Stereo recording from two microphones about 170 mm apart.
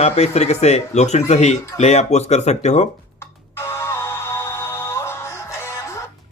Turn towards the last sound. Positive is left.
turn(degrees=15)  # may be behind; listen again after turning